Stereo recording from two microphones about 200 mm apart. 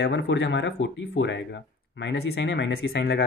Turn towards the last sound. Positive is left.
turn(degrees=55)  # may be behind; listen again after turning